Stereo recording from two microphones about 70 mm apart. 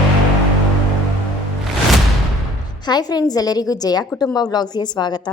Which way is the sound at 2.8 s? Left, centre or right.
Left.